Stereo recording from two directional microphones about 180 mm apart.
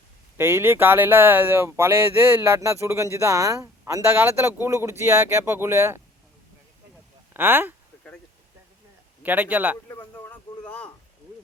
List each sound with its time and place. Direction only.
0.3 s speech: 15° right (ahead or behind)
7.3 s speech: 10° right (ahead or behind)
9.2 s speech: 10° right (ahead or behind)
9.9 s speech: 15° left (ahead or behind)
10.6 s a sound: 5° left (ahead or behind)